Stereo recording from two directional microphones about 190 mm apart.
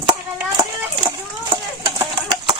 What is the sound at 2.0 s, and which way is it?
Bird, 25° right (ahead or behind).